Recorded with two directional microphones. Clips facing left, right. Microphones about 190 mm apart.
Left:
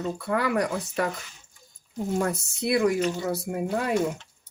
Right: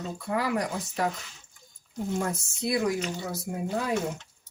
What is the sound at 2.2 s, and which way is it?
Speech, 65° left (ahead or behind).